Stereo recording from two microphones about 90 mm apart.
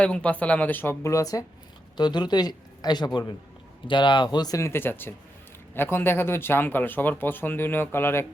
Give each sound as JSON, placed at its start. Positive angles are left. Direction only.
{"t": 0.0, "sound": "speech", "side_deg": 15}
{"t": 1.0, "sound": "speech", "side_deg": 40}
{"t": 2.0, "sound": "a man's voice", "side_deg": 55}
{"t": 4.5, "sound": "speech", "side_deg": 30}